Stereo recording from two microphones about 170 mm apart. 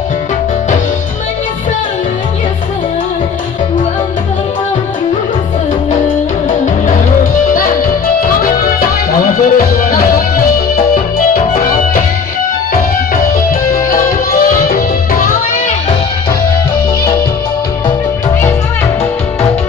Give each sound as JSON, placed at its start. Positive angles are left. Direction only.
{"t": 8.2, "sound": "music", "side_deg": 55}